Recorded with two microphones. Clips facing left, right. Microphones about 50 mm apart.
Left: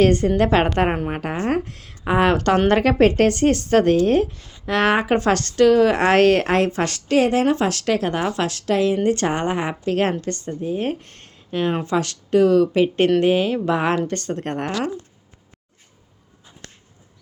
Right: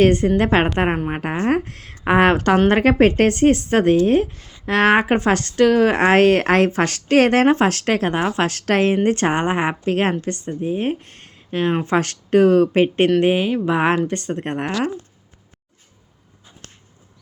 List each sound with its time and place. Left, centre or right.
0.0 s speech: right
0.9 s a woman's voice: centre
1.1 s speech: right
7.2 s speech: right
7.4 s a woman's voice: right
9.0 s speech: right
11.9 s speech: right
13.2 s speech: right